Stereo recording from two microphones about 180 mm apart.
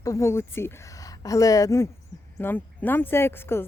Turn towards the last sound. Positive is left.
turn(degrees=10)  # may be behind; listen again after turning